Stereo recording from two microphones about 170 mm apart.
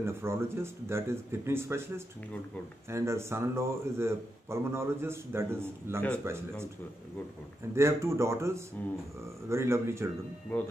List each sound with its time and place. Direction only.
0.0 s a man's voice: 15° right (ahead or behind)
7.7 s a man's voice: 15° right (ahead or behind)
10.5 s speech: 10° left (ahead or behind)